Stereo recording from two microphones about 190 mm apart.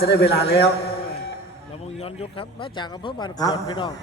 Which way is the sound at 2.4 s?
25° left (ahead or behind).